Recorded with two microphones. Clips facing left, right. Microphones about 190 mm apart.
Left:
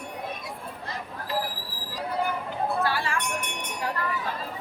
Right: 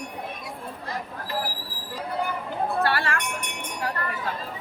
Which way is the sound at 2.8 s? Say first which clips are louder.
Right 3 dB; 70° right (ahead or behind).